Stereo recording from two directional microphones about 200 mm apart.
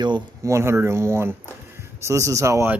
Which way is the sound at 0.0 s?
20° right (ahead or behind).